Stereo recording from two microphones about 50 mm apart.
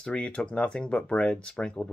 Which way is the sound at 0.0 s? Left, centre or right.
Centre.